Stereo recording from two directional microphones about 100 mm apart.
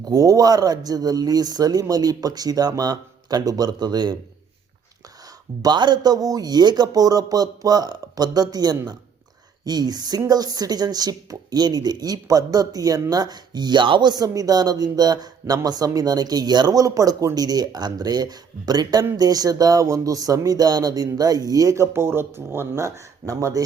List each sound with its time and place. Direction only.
0.0 s speech: 40° right (ahead or behind)
5.6 s speech: 45° right (ahead or behind)